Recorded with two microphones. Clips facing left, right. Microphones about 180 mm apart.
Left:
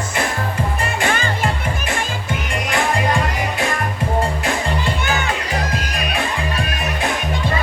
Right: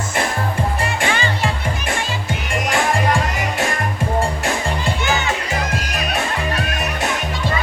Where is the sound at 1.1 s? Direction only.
50° left (ahead or behind).